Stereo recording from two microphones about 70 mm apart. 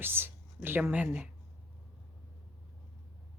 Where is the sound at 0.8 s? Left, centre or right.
Right.